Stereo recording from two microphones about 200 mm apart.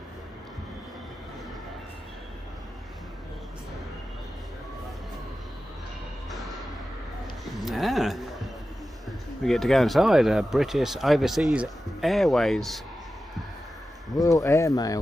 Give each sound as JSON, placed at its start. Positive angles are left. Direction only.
{"t": 7.6, "sound": "speech", "side_deg": 0}
{"t": 9.4, "sound": "speech", "side_deg": 0}
{"t": 14.1, "sound": "speech", "side_deg": 15}